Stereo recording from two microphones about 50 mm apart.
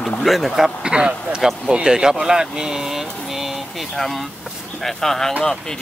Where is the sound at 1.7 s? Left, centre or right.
Centre.